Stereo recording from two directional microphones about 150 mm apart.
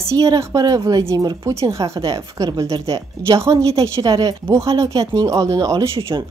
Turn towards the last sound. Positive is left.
turn(degrees=-20)  # may be behind; listen again after turning